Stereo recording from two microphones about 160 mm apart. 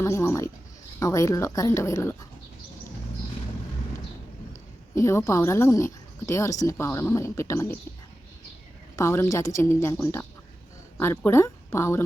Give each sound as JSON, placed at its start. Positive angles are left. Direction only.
{"t": 0.0, "sound": "speech", "side_deg": 15}
{"t": 4.9, "sound": "speech", "side_deg": 15}
{"t": 9.0, "sound": "speech", "side_deg": 15}